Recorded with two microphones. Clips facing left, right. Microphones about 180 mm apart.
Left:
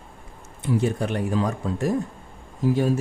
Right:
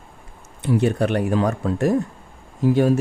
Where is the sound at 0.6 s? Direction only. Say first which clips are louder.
Right 4 dB; 70° right (ahead or behind).